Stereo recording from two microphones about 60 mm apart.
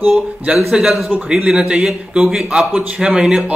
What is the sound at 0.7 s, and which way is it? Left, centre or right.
A man's voice, centre.